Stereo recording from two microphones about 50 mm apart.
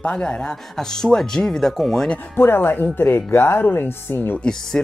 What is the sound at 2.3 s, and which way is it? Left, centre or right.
Speech, left.